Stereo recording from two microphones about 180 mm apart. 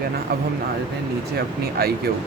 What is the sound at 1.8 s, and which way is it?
Speech, 60° right (ahead or behind).